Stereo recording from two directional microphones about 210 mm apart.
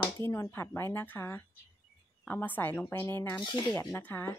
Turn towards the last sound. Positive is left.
turn(degrees=10)  # may be behind; listen again after turning